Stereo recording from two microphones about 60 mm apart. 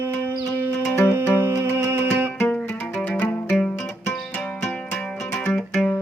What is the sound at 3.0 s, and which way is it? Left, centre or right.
Music, left.